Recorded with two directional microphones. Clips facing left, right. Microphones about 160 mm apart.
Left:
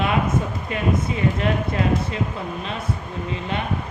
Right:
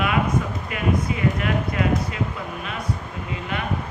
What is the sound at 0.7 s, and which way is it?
Speech, 30° left (ahead or behind).